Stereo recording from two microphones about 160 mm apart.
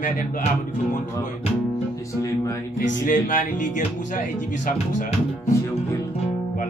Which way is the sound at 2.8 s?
55° left (ahead or behind).